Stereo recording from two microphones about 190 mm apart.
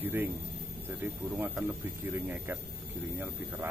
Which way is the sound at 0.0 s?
10° right (ahead or behind).